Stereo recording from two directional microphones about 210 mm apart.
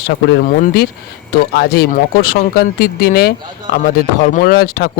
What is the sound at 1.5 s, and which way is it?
Speech, 50° left (ahead or behind).